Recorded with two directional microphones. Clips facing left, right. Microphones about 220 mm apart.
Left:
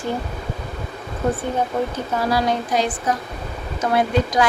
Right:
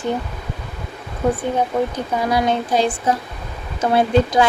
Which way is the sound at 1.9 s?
20° right (ahead or behind).